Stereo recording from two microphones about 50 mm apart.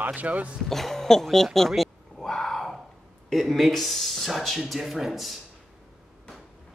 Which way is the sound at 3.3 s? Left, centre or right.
Centre.